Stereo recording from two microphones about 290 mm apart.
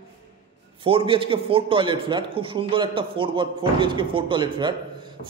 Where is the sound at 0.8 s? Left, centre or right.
Centre.